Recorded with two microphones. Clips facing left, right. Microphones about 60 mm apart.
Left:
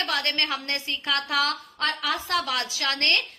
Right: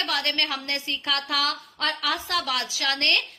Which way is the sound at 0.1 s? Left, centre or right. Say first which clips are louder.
Even; left.